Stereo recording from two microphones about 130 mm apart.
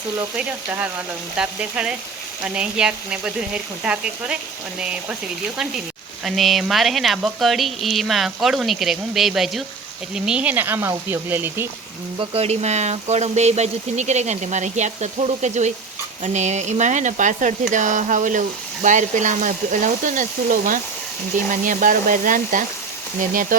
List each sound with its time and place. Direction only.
0.3 s speech: 10° right (ahead or behind)
6.2 s speech: centre (ahead or behind); by 11.7 s 15° right (ahead or behind)
12.2 s speech: 50° right (ahead or behind); by 23.6 s 90° right